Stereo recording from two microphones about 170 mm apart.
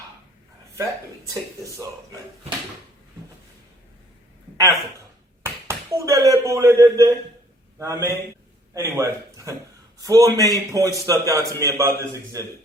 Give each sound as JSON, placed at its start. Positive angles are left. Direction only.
{"t": 1.3, "sound": "a man's voice", "side_deg": -20}
{"t": 4.5, "sound": "a man's voice", "side_deg": -20}